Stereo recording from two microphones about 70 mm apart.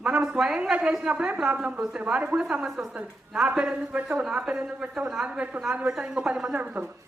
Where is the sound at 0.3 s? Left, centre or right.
Centre.